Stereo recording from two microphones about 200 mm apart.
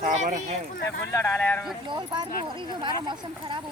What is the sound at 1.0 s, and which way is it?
Speech, 10° left (ahead or behind).